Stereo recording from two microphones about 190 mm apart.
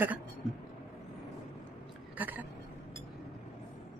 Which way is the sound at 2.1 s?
10° right (ahead or behind).